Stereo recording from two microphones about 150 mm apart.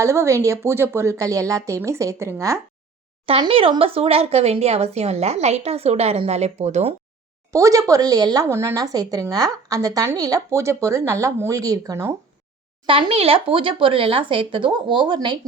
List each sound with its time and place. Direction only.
0.0 s speech: 20° right (ahead or behind)
3.2 s speech: 40° right (ahead or behind)
7.5 s speech: 20° right (ahead or behind)
12.8 s speech: 35° right (ahead or behind)